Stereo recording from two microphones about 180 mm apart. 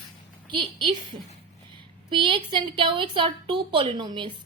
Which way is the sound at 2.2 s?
25° right (ahead or behind).